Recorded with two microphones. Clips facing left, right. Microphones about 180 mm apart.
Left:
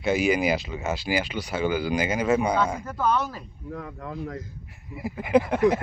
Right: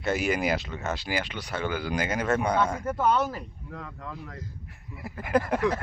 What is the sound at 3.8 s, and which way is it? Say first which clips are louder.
Speech: left 5 dB; 50° left (ahead or behind).